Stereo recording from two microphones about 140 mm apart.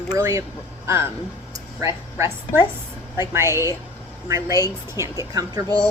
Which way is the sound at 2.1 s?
20° right (ahead or behind).